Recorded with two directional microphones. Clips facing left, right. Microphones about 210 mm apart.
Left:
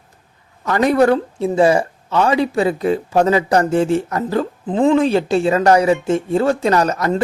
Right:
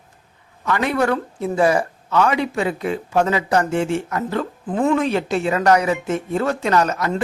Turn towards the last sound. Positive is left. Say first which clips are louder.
# left 3 dB
turn(degrees=40)  # may be behind; listen again after turning